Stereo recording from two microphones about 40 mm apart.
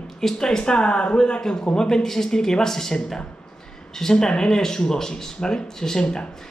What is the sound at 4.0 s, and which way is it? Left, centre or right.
Speech, centre.